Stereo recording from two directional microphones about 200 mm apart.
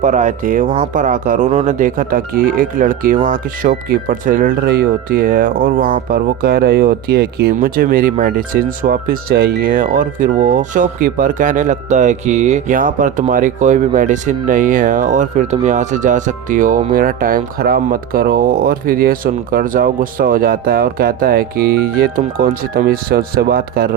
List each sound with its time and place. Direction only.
0.0 s speech: 40° right (ahead or behind)